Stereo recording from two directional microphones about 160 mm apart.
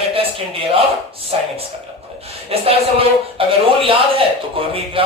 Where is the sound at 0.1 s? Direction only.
35° right (ahead or behind).